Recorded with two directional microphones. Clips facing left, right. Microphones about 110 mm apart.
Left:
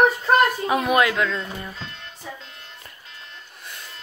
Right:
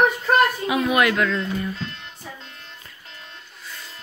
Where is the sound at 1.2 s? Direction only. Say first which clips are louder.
Right 4 dB; 10° left (ahead or behind).